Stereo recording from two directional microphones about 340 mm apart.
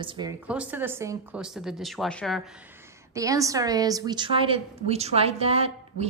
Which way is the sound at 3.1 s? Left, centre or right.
Centre.